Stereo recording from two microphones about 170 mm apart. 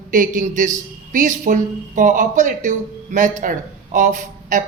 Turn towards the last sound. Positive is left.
turn(degrees=-50)  # may be behind; listen again after turning